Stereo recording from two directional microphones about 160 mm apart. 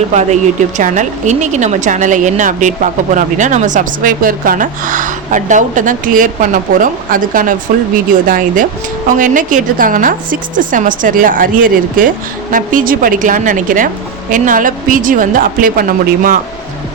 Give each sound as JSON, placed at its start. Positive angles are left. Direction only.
{"t": 0.1, "sound": "a woman's voice", "side_deg": -45}